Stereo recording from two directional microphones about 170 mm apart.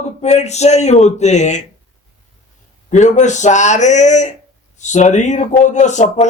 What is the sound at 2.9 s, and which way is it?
A man's voice, 45° left (ahead or behind).